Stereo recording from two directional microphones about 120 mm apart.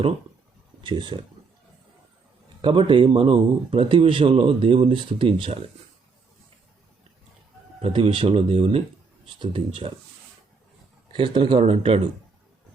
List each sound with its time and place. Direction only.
0.8 s speech: 40° right (ahead or behind)
2.6 s speech: 45° right (ahead or behind)
7.8 s speech: 55° right (ahead or behind)
11.1 s speech: 40° right (ahead or behind)